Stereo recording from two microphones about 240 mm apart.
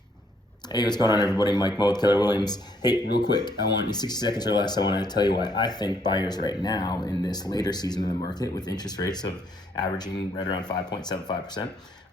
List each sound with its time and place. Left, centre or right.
0.7 s speech: centre